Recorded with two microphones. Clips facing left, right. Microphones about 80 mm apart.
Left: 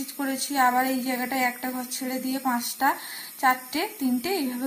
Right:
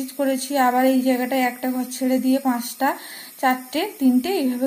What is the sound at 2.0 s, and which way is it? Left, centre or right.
Speech, left.